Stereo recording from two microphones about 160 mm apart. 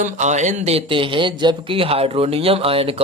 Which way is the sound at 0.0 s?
50° right (ahead or behind).